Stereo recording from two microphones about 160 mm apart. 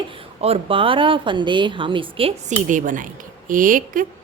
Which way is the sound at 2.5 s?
55° right (ahead or behind).